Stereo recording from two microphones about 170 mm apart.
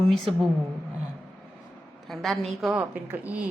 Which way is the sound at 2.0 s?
Centre (ahead or behind).